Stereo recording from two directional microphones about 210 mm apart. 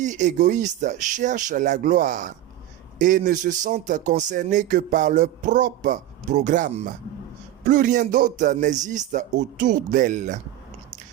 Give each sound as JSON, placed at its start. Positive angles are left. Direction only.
{"t": 0.0, "sound": "speech", "side_deg": -35}